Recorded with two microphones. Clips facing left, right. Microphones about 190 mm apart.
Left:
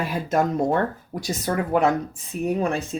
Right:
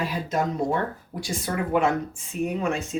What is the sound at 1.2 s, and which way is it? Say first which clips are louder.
Speech: left 3 dB; 40° left (ahead or behind).